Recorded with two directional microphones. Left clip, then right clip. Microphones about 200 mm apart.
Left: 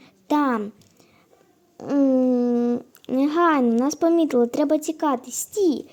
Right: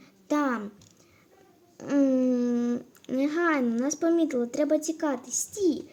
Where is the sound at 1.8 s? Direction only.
20° left (ahead or behind).